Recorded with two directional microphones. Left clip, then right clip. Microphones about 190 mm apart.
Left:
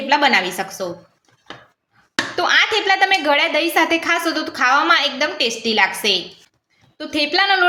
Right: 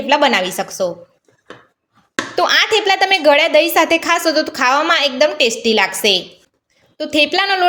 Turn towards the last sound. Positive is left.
turn(degrees=-45)  # may be behind; listen again after turning